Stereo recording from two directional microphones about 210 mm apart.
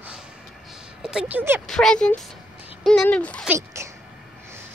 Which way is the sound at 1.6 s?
5° left (ahead or behind).